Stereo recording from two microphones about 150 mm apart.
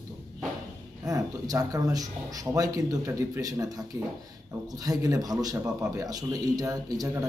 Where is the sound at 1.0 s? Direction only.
25° right (ahead or behind).